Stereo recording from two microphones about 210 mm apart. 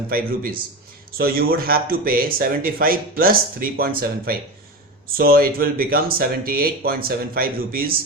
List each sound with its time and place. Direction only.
0.1 s speech: 45° right (ahead or behind)